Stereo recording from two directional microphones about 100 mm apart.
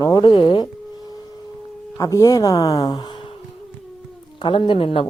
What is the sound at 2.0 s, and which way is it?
Speech, 35° left (ahead or behind).